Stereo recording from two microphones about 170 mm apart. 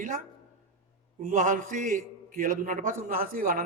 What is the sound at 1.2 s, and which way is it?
A man's voice, 50° right (ahead or behind).